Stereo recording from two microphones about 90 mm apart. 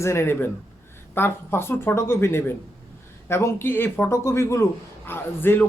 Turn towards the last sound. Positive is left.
turn(degrees=25)  # may be behind; listen again after turning